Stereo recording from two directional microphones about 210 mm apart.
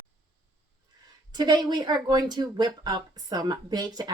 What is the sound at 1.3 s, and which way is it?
Speech, 20° right (ahead or behind).